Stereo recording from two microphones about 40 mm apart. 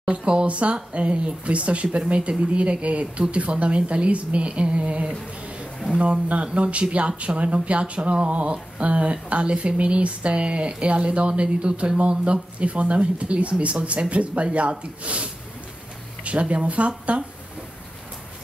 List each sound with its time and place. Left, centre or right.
0.0 s speech: right